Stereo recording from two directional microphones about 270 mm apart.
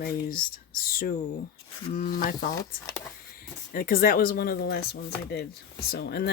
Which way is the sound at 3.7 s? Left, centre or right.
Left.